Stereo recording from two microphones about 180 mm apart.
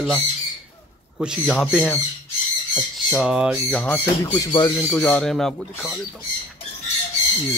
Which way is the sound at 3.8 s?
10° left (ahead or behind).